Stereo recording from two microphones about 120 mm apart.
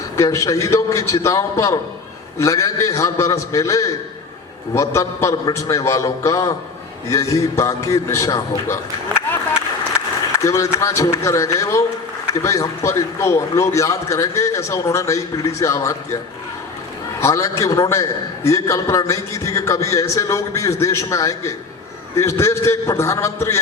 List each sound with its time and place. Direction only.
0.2 s a man's voice: 25° left (ahead or behind)
10.3 s a man's voice: 25° left (ahead or behind)
17.2 s a man's voice: 25° left (ahead or behind)